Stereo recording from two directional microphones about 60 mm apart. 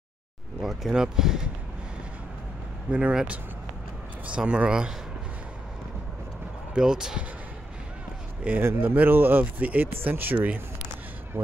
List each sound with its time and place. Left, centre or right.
0.6 s speech: centre
2.9 s speech: right
4.3 s speech: centre
6.7 s speech: centre
8.6 s speech: right
11.3 s speech: right